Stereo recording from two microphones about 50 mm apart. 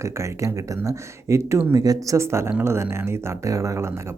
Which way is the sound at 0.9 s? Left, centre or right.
Right.